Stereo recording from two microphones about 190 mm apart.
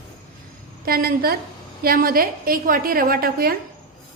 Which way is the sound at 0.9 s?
50° right (ahead or behind).